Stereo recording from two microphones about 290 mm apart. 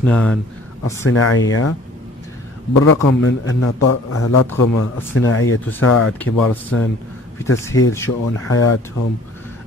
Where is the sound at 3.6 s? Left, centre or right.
Left.